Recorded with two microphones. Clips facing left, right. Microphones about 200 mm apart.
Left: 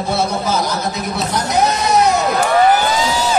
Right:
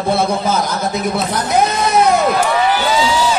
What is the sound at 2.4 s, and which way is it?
Crowd, 50° left (ahead or behind).